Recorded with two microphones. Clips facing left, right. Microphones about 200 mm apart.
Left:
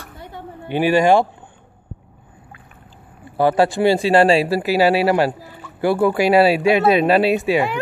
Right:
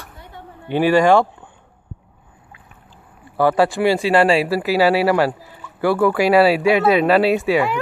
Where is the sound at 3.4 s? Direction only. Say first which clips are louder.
Even; 20° left (ahead or behind).